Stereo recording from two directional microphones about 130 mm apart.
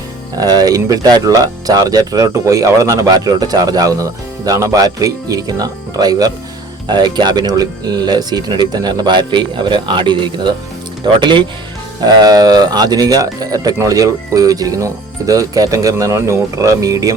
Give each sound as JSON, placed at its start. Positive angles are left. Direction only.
{"t": 0.3, "sound": "speech", "side_deg": -30}